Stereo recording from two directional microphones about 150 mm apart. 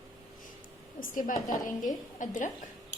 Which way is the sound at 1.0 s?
65° left (ahead or behind).